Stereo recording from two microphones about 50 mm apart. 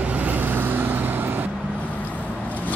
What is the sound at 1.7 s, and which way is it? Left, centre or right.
Vehicle, left.